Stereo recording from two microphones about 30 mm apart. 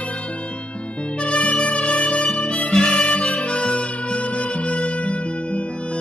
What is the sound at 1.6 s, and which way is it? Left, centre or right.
Music, left.